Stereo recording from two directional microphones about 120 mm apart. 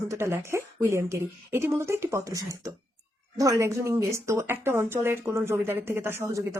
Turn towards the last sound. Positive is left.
turn(degrees=-20)  # may be behind; listen again after turning